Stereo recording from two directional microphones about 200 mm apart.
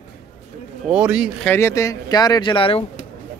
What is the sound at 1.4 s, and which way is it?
Speech, 10° left (ahead or behind).